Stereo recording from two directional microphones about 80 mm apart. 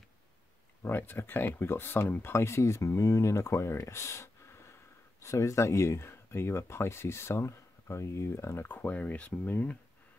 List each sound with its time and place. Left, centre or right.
0.8 s speech: left